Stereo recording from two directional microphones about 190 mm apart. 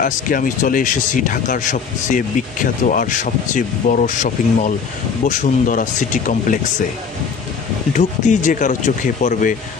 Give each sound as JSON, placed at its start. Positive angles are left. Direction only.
{"t": 0.0, "sound": "speech", "side_deg": 45}
{"t": 7.9, "sound": "speech", "side_deg": 40}